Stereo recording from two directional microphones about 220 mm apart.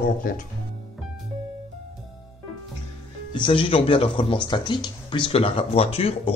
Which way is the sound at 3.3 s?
20° left (ahead or behind).